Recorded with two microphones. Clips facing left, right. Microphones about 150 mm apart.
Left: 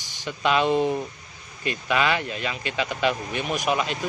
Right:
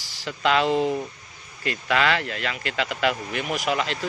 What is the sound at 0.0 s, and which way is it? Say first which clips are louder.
Speech: right 1 dB; 20° left (ahead or behind).